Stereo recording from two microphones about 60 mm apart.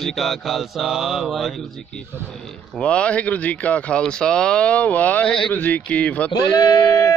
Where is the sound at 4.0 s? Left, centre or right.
Centre.